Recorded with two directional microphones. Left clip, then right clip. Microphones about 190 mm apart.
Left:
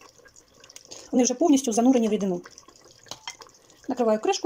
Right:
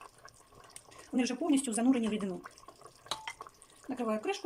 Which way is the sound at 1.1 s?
30° left (ahead or behind).